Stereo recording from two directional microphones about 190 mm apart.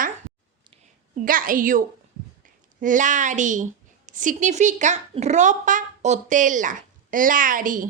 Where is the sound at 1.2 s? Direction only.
45° right (ahead or behind).